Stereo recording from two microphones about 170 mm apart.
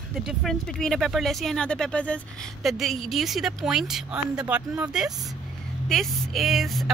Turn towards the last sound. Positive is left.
turn(degrees=0)  # may be behind; listen again after turning